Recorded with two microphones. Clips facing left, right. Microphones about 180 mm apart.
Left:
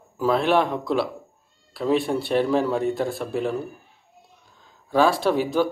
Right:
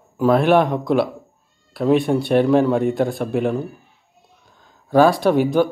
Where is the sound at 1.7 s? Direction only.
55° right (ahead or behind).